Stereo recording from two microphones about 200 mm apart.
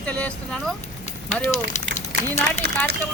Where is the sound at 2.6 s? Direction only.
55° right (ahead or behind).